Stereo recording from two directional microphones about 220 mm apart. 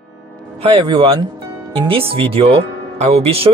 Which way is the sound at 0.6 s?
25° right (ahead or behind).